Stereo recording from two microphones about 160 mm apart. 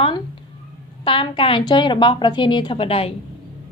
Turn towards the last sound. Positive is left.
turn(degrees=35)  # may be behind; listen again after turning